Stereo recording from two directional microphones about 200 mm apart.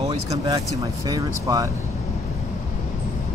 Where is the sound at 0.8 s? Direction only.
15° right (ahead or behind).